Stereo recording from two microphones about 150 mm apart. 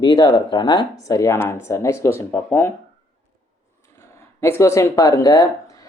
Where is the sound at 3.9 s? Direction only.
20° left (ahead or behind).